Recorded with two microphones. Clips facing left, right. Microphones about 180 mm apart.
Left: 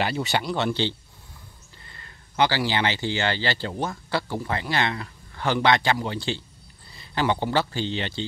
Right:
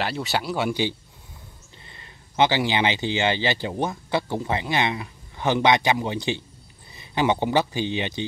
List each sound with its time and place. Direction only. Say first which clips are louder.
0.0 s speech: left 1 dB; centre (ahead or behind); by 8.3 s 15° right (ahead or behind)